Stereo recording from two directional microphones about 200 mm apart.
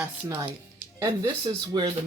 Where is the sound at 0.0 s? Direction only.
15° right (ahead or behind).